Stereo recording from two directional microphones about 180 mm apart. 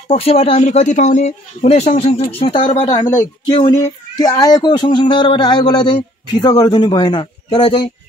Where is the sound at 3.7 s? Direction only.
20° left (ahead or behind).